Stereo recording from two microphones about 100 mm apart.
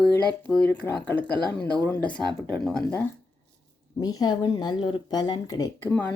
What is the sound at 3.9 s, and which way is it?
Speech, 40° left (ahead or behind).